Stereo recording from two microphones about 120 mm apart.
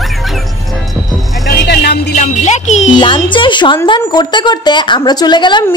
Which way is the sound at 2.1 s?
75° left (ahead or behind).